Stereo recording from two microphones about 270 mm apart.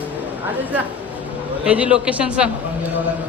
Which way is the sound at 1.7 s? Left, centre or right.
Centre.